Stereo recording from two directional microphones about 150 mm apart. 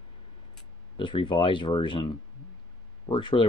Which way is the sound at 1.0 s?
30° left (ahead or behind).